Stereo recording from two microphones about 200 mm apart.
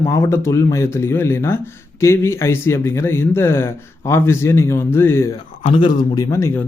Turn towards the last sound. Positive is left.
turn(degrees=25)  # may be behind; listen again after turning